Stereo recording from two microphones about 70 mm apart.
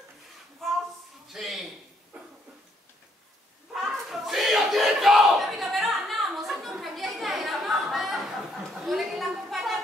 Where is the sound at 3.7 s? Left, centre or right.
Centre.